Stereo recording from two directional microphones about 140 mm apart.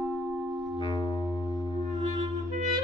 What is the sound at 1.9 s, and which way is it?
Music, 55° right (ahead or behind).